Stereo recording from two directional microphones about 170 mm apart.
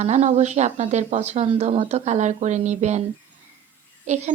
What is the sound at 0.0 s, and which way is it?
Speech, 45° right (ahead or behind).